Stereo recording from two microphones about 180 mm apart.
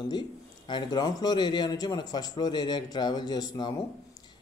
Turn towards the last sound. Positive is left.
turn(degrees=20)  # may be behind; listen again after turning